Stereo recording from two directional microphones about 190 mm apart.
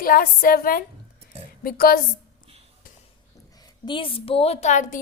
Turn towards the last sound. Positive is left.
turn(degrees=40)  # may be behind; listen again after turning